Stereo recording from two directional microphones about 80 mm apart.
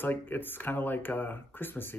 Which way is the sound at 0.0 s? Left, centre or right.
Left.